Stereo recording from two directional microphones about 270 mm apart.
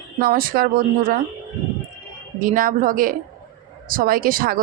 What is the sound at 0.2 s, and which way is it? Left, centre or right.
A woman's voice, right.